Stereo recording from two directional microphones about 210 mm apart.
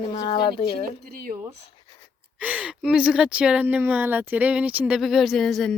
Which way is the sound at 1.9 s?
20° left (ahead or behind).